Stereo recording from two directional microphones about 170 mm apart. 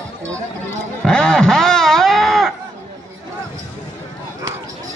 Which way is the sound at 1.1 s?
5° left (ahead or behind).